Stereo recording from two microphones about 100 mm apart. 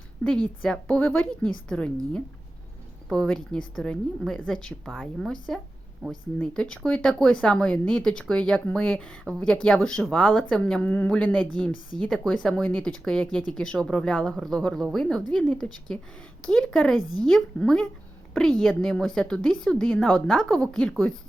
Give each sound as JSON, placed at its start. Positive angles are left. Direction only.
{"t": 0.2, "sound": "a woman's voice", "side_deg": 5}
{"t": 0.9, "sound": "a woman's voice", "side_deg": 20}
{"t": 3.2, "sound": "a woman's voice", "side_deg": 10}
{"t": 12.6, "sound": "a woman's voice", "side_deg": 15}